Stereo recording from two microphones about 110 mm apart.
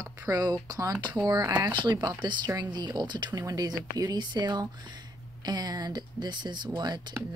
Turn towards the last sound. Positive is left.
turn(degrees=-40)  # may be behind; listen again after turning